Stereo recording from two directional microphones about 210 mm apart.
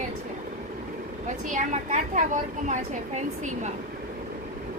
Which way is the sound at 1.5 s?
35° right (ahead or behind).